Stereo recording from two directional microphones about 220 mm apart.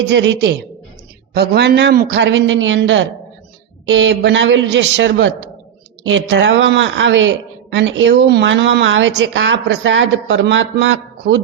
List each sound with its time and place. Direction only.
0.1 s a man's voice: 55° right (ahead or behind)